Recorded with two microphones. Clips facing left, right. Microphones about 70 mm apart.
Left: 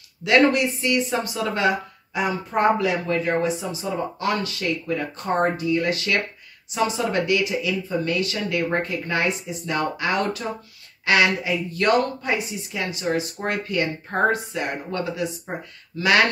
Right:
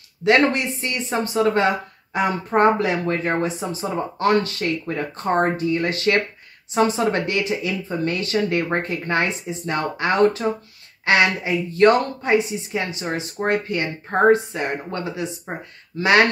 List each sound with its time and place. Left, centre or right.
0.2 s speech: right